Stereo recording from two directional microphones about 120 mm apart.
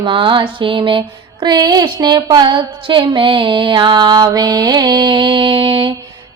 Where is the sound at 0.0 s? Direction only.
45° right (ahead or behind).